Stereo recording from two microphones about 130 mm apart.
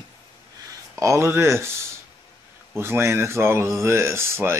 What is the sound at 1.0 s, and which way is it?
Speech, 20° right (ahead or behind).